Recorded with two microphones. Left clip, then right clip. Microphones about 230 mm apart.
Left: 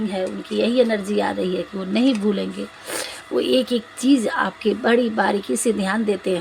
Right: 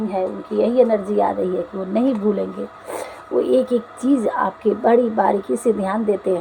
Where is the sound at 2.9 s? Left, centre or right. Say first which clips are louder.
Right 1 dB; left.